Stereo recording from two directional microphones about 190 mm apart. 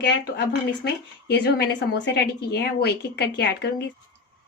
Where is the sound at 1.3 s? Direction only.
60° left (ahead or behind).